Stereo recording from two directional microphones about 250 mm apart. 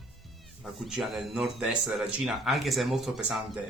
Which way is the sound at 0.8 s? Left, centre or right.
Centre.